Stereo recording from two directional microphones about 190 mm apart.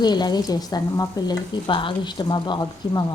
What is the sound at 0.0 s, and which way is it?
Speech, 20° left (ahead or behind).